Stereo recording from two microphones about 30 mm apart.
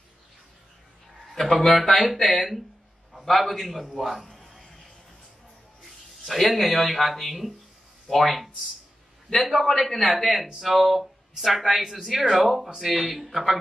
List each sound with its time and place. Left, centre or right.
1.5 s speech: left
1.8 s speech: centre
3.3 s speech: centre
4.5 s a sound: centre
6.2 s speech: centre